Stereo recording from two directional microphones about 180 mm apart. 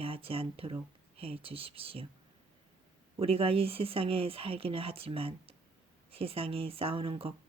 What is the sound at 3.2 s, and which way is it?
Speech, 30° right (ahead or behind).